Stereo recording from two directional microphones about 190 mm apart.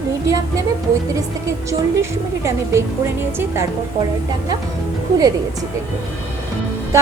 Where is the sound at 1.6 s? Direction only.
15° right (ahead or behind).